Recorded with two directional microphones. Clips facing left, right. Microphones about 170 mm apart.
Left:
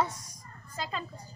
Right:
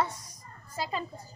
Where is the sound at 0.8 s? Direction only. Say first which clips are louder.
Right 3 dB; 5° right (ahead or behind).